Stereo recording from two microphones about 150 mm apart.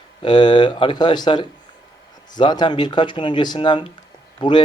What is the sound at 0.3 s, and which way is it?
Speech, 30° left (ahead or behind).